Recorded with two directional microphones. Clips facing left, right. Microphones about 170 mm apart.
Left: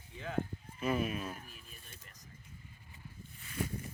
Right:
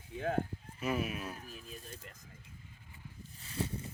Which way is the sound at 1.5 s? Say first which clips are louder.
Right 8 dB; 35° right (ahead or behind).